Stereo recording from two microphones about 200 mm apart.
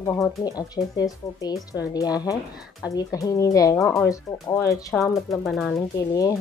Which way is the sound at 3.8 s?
5° left (ahead or behind).